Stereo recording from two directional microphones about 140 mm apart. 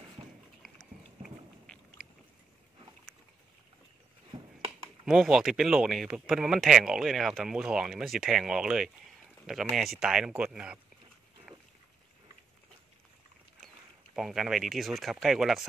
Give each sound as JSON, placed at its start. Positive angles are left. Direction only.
{"t": 0.2, "sound": "a sound", "side_deg": -40}
{"t": 0.6, "sound": "dog", "side_deg": 0}
{"t": 1.7, "sound": "boat", "side_deg": 10}
{"t": 4.3, "sound": "a sound", "side_deg": -35}
{"t": 5.0, "sound": "speech", "side_deg": 0}
{"t": 14.1, "sound": "speech", "side_deg": -5}